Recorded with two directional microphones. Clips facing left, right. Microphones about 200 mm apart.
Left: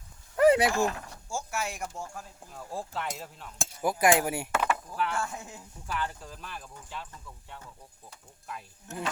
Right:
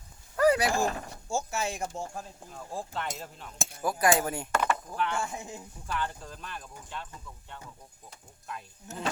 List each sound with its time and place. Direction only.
0.3 s a sound: 25° left (ahead or behind)
1.3 s speech: 25° right (ahead or behind)
2.5 s speech: 5° left (ahead or behind)
3.8 s speech: 15° left (ahead or behind)
5.2 s speech: 15° right (ahead or behind)
5.9 s speech: 5° left (ahead or behind)